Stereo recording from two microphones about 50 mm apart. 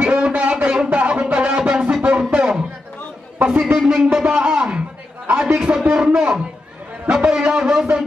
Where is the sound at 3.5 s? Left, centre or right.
Centre.